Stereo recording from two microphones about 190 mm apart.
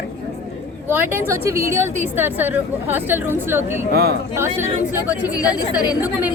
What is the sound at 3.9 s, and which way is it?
Speech, 55° right (ahead or behind).